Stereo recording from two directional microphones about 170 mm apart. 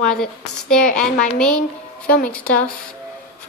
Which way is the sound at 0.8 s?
55° left (ahead or behind).